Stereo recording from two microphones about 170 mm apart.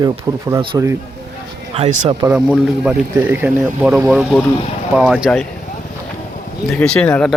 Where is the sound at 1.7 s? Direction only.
35° right (ahead or behind).